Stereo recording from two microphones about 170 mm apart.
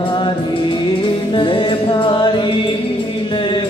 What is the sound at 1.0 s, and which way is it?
Music, 30° left (ahead or behind).